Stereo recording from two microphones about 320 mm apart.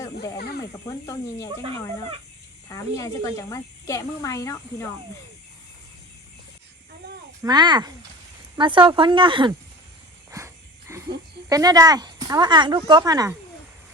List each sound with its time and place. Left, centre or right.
0.3 s speech: left
0.7 s speech: centre
2.6 s speech: centre
7.4 s speech: centre
10.3 s a sound: centre
11.4 s speech: centre